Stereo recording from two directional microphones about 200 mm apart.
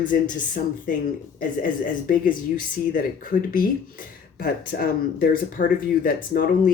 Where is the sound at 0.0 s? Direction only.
40° left (ahead or behind).